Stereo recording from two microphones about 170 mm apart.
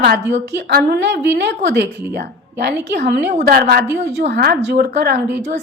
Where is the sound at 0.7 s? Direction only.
75° right (ahead or behind).